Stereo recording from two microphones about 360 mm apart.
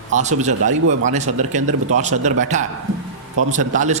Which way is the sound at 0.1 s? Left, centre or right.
Centre.